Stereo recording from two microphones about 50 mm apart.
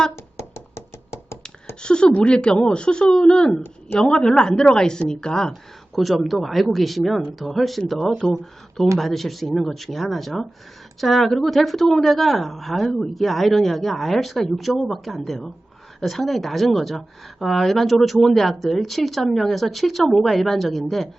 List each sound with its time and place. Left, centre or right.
1.1 s a sound: left
1.8 s a woman's voice: centre
5.9 s a woman's voice: centre